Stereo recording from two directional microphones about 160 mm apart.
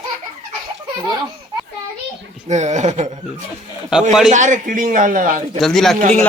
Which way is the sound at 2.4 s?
45° right (ahead or behind).